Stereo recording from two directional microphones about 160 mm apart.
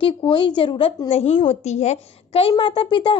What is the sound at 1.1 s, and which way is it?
A woman's voice, 45° left (ahead or behind).